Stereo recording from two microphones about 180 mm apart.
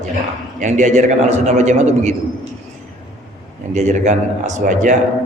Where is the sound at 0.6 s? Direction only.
40° right (ahead or behind).